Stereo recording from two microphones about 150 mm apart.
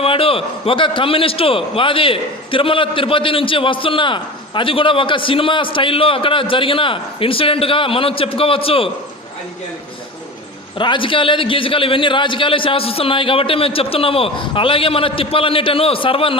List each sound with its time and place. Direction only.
0.0 s a man's voice: 40° left (ahead or behind)
10.8 s a man's voice: 35° left (ahead or behind)